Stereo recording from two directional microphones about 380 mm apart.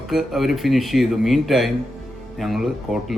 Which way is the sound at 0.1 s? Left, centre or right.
Centre.